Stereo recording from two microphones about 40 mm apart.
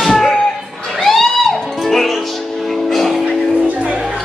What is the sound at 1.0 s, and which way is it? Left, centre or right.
Music, centre.